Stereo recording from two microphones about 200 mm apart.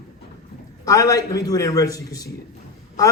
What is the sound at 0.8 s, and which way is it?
A man's voice, 15° left (ahead or behind).